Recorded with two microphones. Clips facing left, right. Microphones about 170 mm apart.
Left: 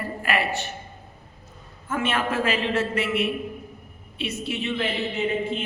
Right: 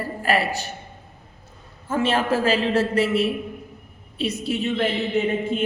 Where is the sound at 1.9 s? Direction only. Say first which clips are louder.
Right 4 dB; 35° right (ahead or behind).